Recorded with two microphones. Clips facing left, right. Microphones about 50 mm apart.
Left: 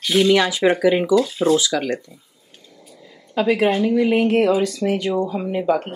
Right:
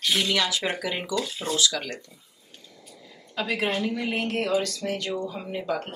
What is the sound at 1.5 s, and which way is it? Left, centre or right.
Speech, centre.